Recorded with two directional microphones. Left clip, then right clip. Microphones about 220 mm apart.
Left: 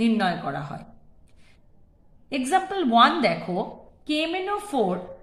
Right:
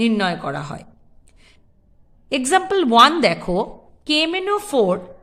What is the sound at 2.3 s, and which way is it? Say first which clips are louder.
A woman's voice: right 6 dB; 45° right (ahead or behind).